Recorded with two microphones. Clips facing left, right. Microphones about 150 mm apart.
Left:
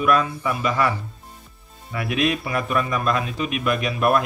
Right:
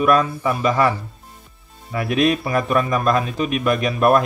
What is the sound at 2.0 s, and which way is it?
Speech, 40° right (ahead or behind).